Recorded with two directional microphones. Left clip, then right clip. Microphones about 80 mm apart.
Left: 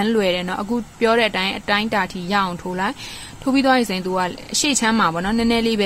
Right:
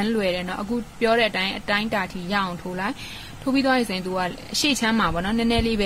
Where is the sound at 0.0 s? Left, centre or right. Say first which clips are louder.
Left 5 dB; left.